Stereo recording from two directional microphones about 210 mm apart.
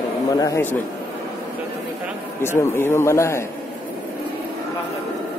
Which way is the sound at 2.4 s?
10° left (ahead or behind).